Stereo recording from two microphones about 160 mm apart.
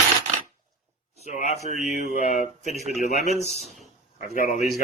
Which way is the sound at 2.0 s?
50° left (ahead or behind).